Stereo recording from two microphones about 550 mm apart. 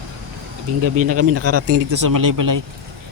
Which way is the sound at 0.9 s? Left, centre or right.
Right.